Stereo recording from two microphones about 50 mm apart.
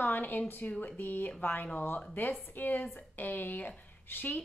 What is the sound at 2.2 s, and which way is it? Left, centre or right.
A woman's voice, left.